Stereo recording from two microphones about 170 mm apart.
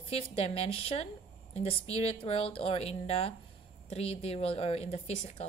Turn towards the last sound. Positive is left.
turn(degrees=35)  # may be behind; listen again after turning